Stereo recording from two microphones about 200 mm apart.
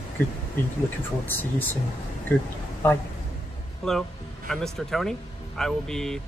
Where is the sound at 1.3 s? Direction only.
10° left (ahead or behind).